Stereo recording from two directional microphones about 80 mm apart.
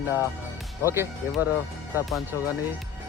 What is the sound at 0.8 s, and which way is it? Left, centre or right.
Speech, right.